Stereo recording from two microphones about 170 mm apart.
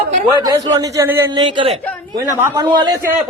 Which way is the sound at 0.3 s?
20° right (ahead or behind).